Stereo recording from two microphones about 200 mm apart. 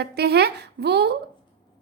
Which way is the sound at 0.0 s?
55° right (ahead or behind).